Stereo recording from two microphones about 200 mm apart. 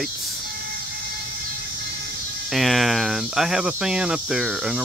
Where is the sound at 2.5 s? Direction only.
Centre (ahead or behind).